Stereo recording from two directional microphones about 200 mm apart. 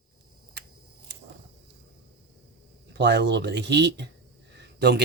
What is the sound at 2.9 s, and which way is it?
Speech, 60° right (ahead or behind).